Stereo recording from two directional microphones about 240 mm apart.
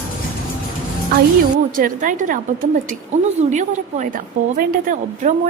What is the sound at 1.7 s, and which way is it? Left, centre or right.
A woman's voice, right.